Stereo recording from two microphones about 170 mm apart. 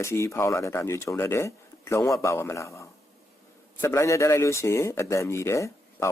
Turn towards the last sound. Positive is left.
turn(degrees=15)  # may be behind; listen again after turning